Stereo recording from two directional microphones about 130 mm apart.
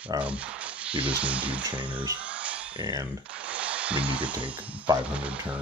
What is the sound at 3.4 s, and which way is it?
Speech, 10° right (ahead or behind).